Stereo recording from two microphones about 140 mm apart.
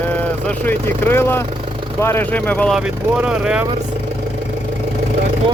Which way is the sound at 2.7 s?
5° right (ahead or behind).